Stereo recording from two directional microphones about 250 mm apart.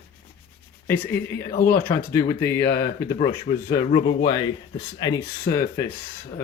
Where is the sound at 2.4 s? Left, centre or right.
Left.